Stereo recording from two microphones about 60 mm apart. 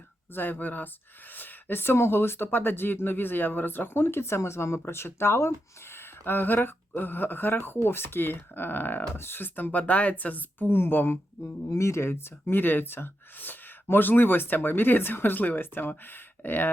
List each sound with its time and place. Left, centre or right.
0.3 s speech: left
11.7 s speech: left